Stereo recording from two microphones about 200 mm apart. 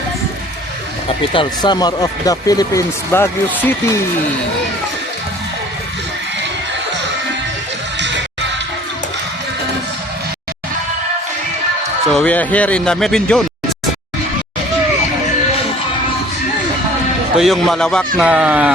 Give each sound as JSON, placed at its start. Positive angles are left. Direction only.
{"t": 1.0, "sound": "speech", "side_deg": 25}
{"t": 7.9, "sound": "music", "side_deg": -60}
{"t": 12.1, "sound": "speech", "side_deg": 5}
{"t": 17.3, "sound": "speech", "side_deg": 0}